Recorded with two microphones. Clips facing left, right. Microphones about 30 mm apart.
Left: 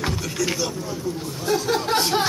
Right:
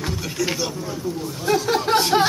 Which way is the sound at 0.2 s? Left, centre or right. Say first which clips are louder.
Even; centre.